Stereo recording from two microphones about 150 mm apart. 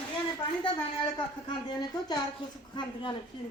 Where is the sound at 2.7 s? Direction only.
35° left (ahead or behind).